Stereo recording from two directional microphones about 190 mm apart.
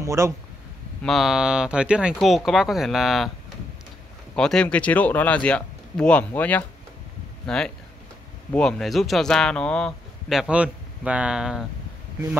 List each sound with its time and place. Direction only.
0.0 s speech: 15° right (ahead or behind)
1.0 s speech: centre (ahead or behind)
4.4 s speech: 5° left (ahead or behind)